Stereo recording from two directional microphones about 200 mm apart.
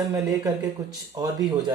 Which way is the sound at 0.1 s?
15° right (ahead or behind).